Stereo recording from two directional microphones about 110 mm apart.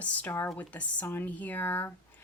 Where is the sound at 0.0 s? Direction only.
15° left (ahead or behind).